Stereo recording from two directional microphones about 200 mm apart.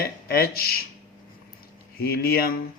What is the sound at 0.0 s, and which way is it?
Speech, 50° left (ahead or behind).